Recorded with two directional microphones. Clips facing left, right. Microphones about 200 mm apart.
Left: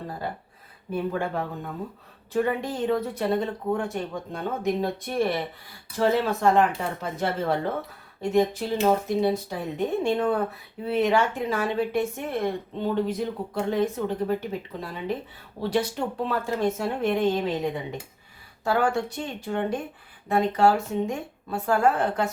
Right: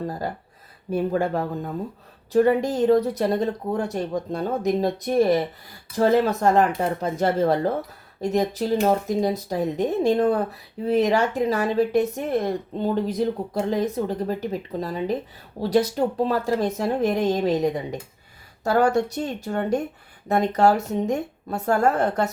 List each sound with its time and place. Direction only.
0.9 s speech: 40° right (ahead or behind)